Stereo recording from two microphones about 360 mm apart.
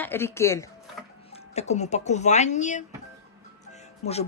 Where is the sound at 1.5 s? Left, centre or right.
Centre.